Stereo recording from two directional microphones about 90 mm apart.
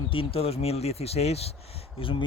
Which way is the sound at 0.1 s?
90° left.